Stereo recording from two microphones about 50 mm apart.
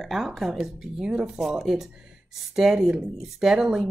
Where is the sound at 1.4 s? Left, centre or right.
Centre.